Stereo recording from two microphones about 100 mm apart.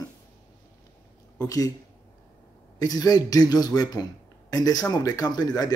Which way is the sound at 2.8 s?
40° left (ahead or behind).